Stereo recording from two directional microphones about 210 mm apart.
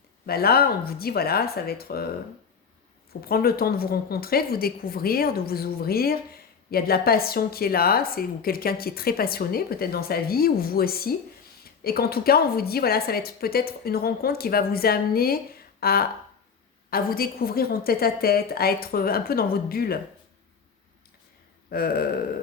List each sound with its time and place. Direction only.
0.3 s a woman's voice: 45° left (ahead or behind)
3.1 s a woman's voice: 45° left (ahead or behind)
21.7 s a woman's voice: 45° left (ahead or behind)